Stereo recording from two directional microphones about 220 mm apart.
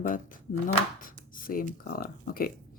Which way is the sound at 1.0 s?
40° left (ahead or behind).